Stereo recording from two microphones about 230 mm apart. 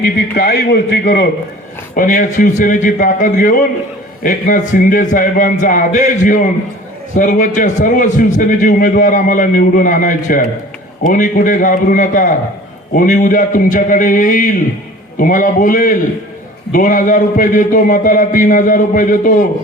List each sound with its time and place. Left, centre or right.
0.0 s a man's voice: left
2.0 s a man's voice: left